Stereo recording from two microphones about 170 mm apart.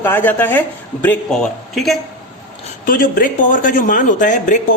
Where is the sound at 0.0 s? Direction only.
10° left (ahead or behind).